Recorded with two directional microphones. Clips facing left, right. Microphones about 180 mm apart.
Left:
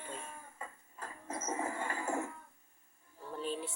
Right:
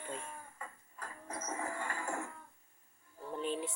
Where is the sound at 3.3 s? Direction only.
20° right (ahead or behind).